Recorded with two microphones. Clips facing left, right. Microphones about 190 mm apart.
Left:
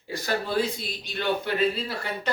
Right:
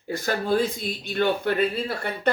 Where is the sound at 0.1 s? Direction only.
50° right (ahead or behind).